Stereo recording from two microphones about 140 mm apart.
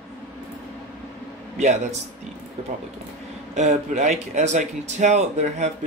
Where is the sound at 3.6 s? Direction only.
55° right (ahead or behind).